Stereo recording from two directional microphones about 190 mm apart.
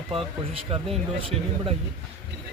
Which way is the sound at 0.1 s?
30° right (ahead or behind).